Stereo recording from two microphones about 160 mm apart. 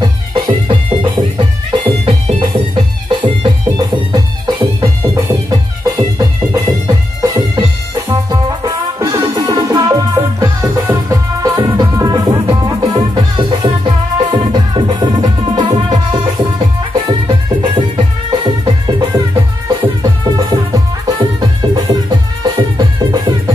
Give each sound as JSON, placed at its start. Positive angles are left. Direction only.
{"t": 0.7, "sound": "music", "side_deg": -30}